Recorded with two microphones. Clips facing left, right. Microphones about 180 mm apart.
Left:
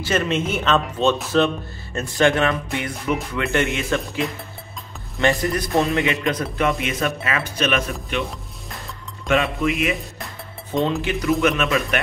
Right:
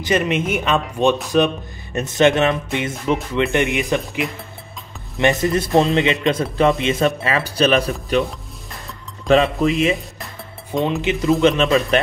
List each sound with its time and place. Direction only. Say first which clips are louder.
0.0 s speech: right 2 dB; 15° right (ahead or behind); by 8.3 s 40° right (ahead or behind)
9.3 s speech: right 5 dB; 30° right (ahead or behind)